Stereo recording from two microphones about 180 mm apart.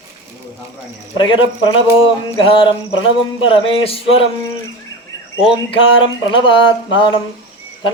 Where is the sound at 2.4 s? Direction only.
30° left (ahead or behind).